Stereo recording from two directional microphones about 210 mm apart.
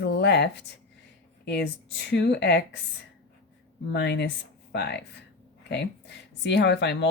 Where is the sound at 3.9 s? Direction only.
50° left (ahead or behind).